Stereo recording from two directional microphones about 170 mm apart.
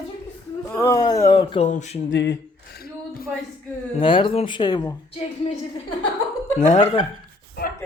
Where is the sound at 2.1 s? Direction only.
90° left.